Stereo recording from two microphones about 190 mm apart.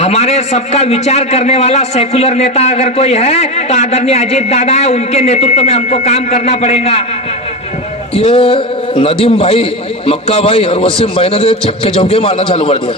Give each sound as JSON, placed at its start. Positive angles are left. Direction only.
{"t": 0.0, "sound": "a man's voice", "side_deg": 35}
{"t": 8.1, "sound": "a sound", "side_deg": 30}
{"t": 9.2, "sound": "a man's voice", "side_deg": 30}